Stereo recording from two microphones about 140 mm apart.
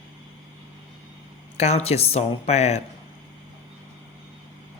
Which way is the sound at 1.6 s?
50° left (ahead or behind).